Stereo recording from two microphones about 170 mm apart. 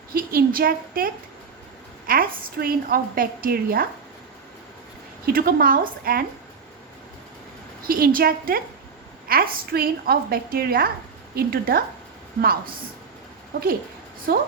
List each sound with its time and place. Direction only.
0.1 s a woman's voice: 60° right (ahead or behind)
5.2 s a woman's voice: 60° right (ahead or behind)
7.9 s a woman's voice: 55° right (ahead or behind)